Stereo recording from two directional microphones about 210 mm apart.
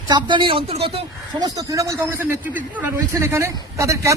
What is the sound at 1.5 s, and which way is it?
A man's voice, 15° right (ahead or behind).